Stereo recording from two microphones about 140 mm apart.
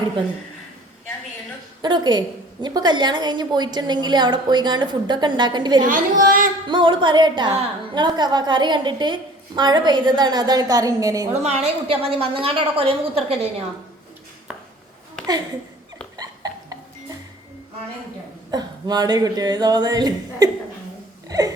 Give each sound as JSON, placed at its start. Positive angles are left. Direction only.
{"t": 1.8, "sound": "a woman's voice", "side_deg": -30}
{"t": 5.8, "sound": "speech", "side_deg": -70}
{"t": 6.7, "sound": "a woman's voice", "side_deg": -35}
{"t": 11.4, "sound": "a woman's voice", "side_deg": -45}
{"t": 16.1, "sound": "a sound", "side_deg": -25}
{"t": 18.5, "sound": "speech", "side_deg": -30}
{"t": 21.2, "sound": "a sound", "side_deg": -25}